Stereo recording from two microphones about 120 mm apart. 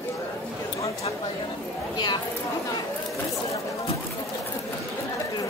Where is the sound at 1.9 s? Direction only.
35° left (ahead or behind).